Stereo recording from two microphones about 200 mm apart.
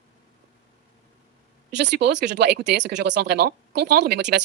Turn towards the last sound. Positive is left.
turn(degrees=-55)  # may be behind; listen again after turning